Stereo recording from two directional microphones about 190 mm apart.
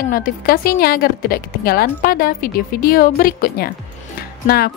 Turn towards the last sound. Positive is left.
turn(degrees=55)  # may be behind; listen again after turning